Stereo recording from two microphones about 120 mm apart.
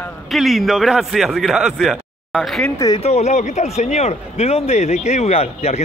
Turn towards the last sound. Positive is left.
turn(degrees=60)  # may be behind; listen again after turning